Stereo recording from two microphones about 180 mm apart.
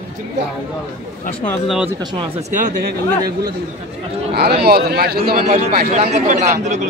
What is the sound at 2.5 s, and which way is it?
Speech, 45° right (ahead or behind).